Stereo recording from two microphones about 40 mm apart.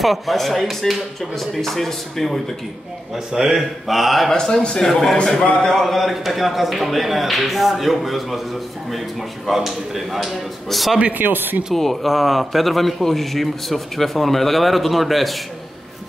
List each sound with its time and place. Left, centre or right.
0.0 s a man's voice: centre
3.3 s a man's voice: centre
3.8 s a man's voice: centre
4.3 s a man's voice: centre
4.7 s a man's voice: centre
9.5 s a man's voice: centre
11.1 s a man's voice: right
11.7 s a man's voice: centre